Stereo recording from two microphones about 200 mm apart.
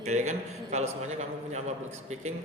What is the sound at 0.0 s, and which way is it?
A man's voice, 35° right (ahead or behind).